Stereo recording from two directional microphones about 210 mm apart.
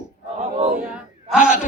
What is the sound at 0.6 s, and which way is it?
Speech, 30° right (ahead or behind).